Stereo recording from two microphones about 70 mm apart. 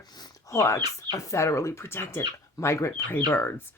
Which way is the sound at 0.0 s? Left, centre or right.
Left.